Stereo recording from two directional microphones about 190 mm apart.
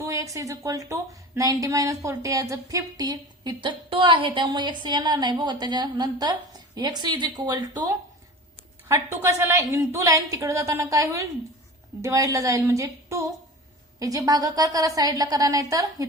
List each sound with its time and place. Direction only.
0.0 s a woman's voice: 15° right (ahead or behind)